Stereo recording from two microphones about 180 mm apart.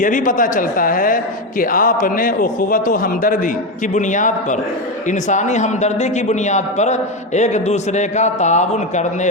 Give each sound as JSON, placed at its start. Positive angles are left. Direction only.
{"t": 0.0, "sound": "a man's voice", "side_deg": 45}